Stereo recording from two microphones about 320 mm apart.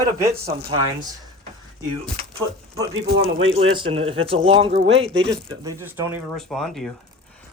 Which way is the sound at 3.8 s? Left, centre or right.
Centre.